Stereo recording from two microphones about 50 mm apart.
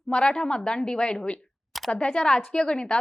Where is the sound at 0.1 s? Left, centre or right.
Centre.